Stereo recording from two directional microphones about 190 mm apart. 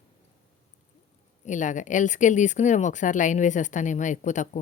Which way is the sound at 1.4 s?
40° left (ahead or behind).